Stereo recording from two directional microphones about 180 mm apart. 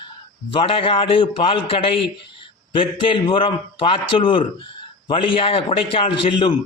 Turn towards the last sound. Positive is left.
turn(degrees=30)  # may be behind; listen again after turning